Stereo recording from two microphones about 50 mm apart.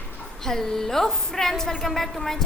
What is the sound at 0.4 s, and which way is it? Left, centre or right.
A woman's voice, centre.